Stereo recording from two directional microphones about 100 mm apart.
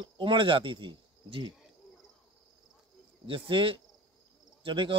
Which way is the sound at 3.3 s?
60° right (ahead or behind).